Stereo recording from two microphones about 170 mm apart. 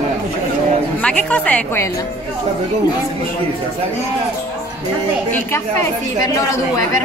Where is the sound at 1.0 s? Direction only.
5° left (ahead or behind).